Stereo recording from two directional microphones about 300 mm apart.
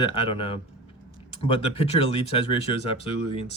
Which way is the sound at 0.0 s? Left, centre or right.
Centre.